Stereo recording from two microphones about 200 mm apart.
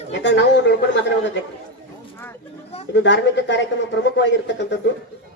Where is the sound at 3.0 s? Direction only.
60° left (ahead or behind).